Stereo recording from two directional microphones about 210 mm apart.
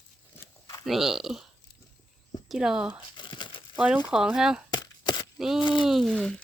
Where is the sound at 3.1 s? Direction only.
20° left (ahead or behind).